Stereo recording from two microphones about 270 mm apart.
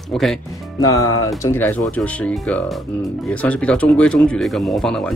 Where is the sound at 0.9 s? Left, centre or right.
Left.